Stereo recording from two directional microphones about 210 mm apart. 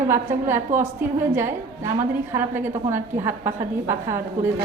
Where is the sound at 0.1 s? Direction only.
10° right (ahead or behind).